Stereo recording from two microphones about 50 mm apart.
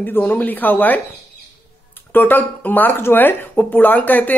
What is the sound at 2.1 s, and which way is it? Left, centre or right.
Speech, left.